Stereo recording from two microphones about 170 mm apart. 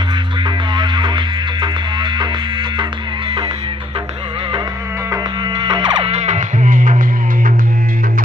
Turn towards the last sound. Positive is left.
turn(degrees=-50)  # may be behind; listen again after turning